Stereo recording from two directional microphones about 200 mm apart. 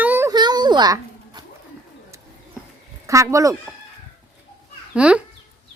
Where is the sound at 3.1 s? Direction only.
15° right (ahead or behind).